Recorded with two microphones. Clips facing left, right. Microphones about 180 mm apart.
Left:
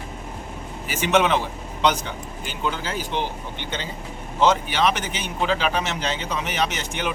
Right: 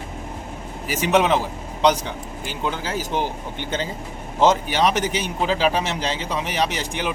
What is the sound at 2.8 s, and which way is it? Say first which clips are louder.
Speech: right 2 dB; 40° right (ahead or behind).